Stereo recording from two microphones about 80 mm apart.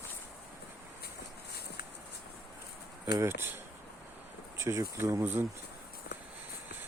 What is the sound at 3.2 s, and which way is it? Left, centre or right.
Speech, right.